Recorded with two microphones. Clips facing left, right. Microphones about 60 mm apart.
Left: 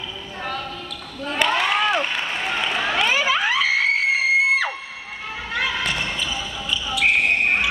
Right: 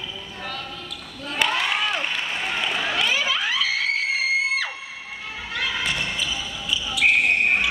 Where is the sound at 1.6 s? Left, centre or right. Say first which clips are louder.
Left 4 dB; left.